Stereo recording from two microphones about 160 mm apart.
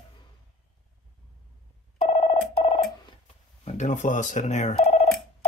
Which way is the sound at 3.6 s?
50° left (ahead or behind).